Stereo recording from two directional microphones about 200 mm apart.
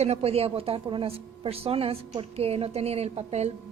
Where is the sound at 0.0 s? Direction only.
30° right (ahead or behind).